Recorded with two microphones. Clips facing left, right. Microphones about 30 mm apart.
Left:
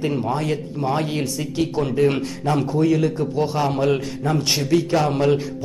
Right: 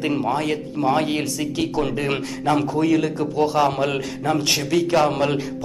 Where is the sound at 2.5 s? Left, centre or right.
Right.